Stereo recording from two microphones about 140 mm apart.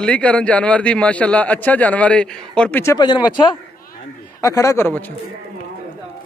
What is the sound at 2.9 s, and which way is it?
Speech, 30° left (ahead or behind).